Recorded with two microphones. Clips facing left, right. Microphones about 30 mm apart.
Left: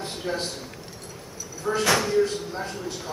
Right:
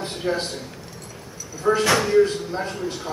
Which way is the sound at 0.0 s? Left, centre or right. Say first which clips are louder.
Right 4 dB; centre.